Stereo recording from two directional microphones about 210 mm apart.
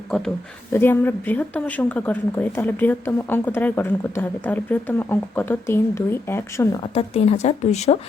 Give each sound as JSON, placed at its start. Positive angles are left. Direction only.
{"t": 0.7, "sound": "speech", "side_deg": 10}
{"t": 6.9, "sound": "speech", "side_deg": 30}